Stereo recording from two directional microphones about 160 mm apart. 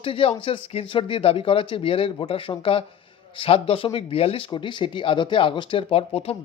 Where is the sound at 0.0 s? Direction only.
35° left (ahead or behind).